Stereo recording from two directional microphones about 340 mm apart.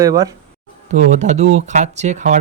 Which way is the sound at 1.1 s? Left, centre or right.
Right.